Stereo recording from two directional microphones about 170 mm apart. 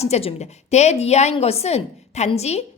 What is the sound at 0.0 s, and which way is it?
A woman's voice, 35° left (ahead or behind).